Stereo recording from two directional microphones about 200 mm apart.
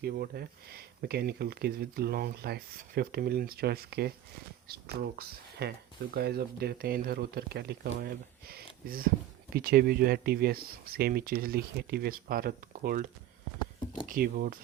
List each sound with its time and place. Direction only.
0.0 s speech: 50° right (ahead or behind)
14.1 s speech: 45° right (ahead or behind)